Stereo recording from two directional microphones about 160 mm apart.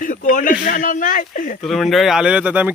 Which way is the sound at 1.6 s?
Centre (ahead or behind).